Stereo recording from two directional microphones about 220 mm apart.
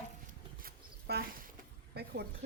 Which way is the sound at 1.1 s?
45° right (ahead or behind).